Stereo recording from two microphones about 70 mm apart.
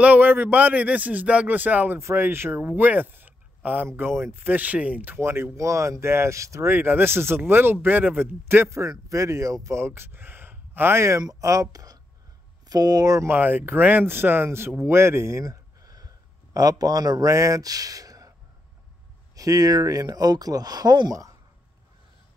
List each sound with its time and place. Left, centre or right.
0.0 s speech: right
2.0 s speech: right
5.2 s speech: right
6.7 s speech: right
8.6 s speech: right
9.8 s speech: right
13.3 s speech: right
15.4 s a sound: right
16.5 s speech: right
19.3 s speech: right